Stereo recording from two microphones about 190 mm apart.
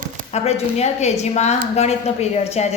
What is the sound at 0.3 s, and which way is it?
A woman's voice, 35° left (ahead or behind).